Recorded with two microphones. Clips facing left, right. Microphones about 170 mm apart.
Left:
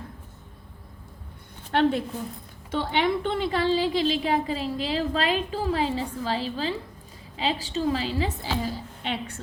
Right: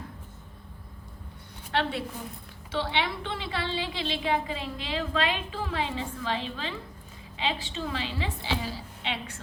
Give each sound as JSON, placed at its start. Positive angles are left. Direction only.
{"t": 1.7, "sound": "a woman's voice", "side_deg": 45}